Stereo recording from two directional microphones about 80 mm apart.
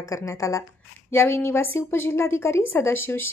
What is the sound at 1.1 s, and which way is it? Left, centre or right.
A woman's voice, left.